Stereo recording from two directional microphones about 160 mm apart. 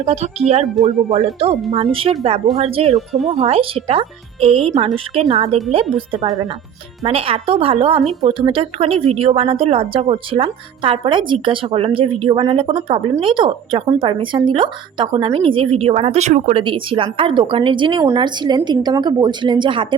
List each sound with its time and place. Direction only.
0.0 s speech: 40° right (ahead or behind)
5.8 s speech: centre (ahead or behind)
7.0 s speech: 35° right (ahead or behind)
16.6 s a woman's voice: 35° right (ahead or behind)